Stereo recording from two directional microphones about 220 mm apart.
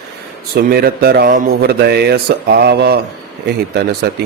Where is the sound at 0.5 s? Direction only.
45° right (ahead or behind).